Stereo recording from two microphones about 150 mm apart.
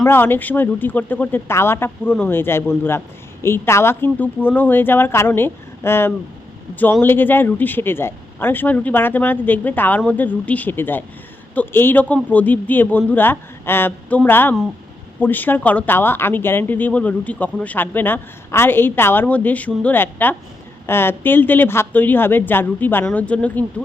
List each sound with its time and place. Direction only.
0.0 s speech: 15° left (ahead or behind)